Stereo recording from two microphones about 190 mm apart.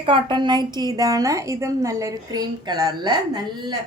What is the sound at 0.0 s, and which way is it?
A woman's voice, 25° right (ahead or behind).